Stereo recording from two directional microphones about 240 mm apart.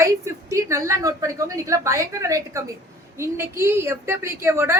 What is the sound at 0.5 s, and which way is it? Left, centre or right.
A woman's voice, centre.